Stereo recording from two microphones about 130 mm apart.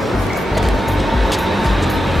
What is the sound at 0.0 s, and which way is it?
Music, centre (ahead or behind).